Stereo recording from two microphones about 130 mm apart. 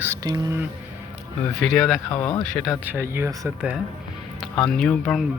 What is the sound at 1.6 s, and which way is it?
Speech, 5° left (ahead or behind).